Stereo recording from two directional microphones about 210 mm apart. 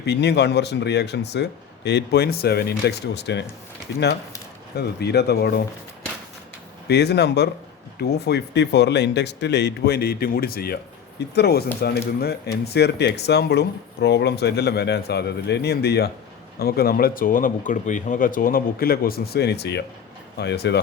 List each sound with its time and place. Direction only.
0.0 s speech: 55° left (ahead or behind)
4.8 s speech: 50° left (ahead or behind)
6.8 s speech: 50° left (ahead or behind)